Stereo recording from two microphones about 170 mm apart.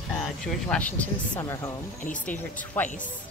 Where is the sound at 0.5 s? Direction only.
5° left (ahead or behind).